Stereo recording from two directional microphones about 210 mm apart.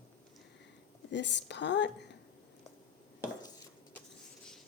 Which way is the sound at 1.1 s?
55° left (ahead or behind).